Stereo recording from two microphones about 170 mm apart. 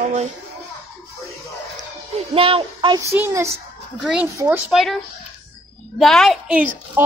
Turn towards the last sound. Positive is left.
turn(degrees=-10)  # may be behind; listen again after turning